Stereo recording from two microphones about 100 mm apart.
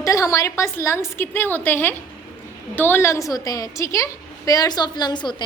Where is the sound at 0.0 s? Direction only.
35° left (ahead or behind).